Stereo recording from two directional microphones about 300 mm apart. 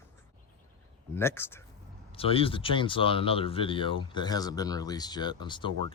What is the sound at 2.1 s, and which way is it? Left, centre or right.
Speech, centre.